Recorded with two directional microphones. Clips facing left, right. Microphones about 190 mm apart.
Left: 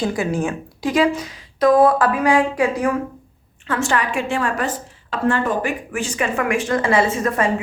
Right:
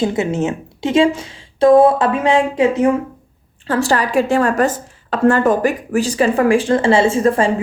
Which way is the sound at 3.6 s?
35° right (ahead or behind).